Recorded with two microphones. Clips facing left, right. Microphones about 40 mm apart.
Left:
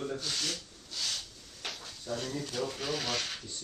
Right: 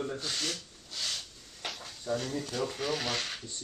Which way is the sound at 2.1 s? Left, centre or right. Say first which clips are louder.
Right 3 dB; centre.